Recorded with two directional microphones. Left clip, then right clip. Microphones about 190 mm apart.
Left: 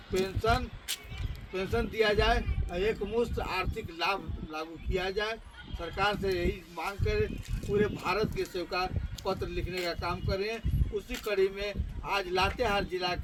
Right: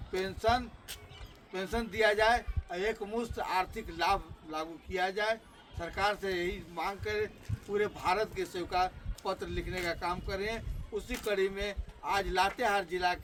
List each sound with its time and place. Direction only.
0.2 s a man's voice: 25° right (ahead or behind)
1.7 s a man's voice: 25° right (ahead or behind)